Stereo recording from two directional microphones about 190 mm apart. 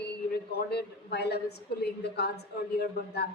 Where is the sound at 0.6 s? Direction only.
60° left (ahead or behind).